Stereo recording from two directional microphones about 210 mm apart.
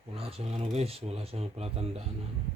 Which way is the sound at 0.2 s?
30° right (ahead or behind).